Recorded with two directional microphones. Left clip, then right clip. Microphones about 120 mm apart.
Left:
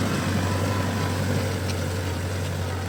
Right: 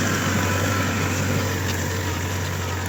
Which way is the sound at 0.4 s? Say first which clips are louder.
Right 4 dB; 90° left.